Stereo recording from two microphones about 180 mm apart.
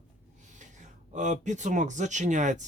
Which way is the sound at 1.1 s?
40° right (ahead or behind).